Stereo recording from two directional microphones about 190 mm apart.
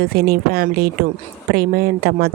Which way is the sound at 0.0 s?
55° right (ahead or behind).